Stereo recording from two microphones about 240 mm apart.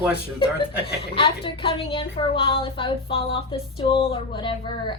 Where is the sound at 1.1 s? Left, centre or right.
Left.